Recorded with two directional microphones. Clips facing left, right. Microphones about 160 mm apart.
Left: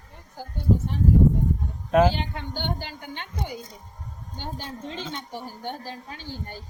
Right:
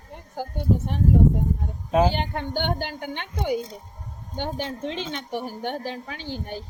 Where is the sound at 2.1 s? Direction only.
55° right (ahead or behind); by 6.6 s 70° right (ahead or behind).